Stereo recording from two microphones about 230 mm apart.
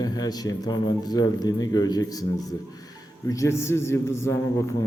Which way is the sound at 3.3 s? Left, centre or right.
Centre.